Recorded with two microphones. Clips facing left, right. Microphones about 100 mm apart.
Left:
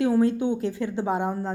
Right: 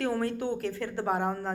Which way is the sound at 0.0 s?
15° left (ahead or behind).